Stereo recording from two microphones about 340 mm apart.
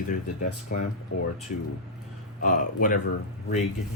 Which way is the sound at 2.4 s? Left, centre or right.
Left.